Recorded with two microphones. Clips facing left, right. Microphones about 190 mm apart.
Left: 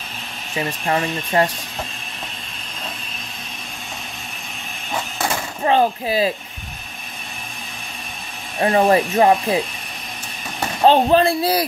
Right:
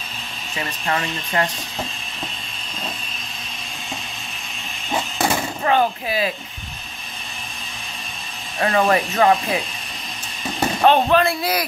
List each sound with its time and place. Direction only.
0.6 s speech: 25° left (ahead or behind)
5.6 s a man's voice: 30° left (ahead or behind)
8.5 s speech: 25° left (ahead or behind)
10.8 s a man's voice: 30° left (ahead or behind)